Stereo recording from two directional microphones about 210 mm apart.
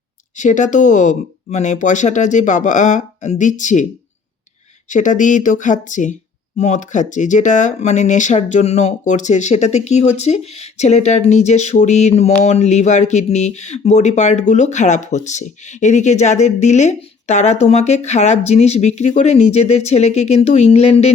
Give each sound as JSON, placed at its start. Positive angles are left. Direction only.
{"t": 0.3, "sound": "speech", "side_deg": 35}
{"t": 4.9, "sound": "speech", "side_deg": 35}